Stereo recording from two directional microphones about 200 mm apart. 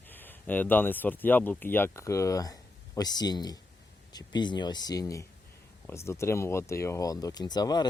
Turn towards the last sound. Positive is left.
turn(degrees=20)  # may be behind; listen again after turning